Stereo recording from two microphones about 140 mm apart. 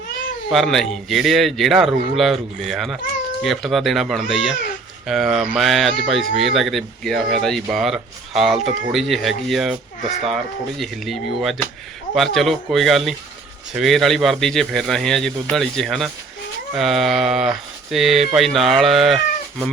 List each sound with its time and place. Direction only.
0.5 s a man's voice: centre (ahead or behind)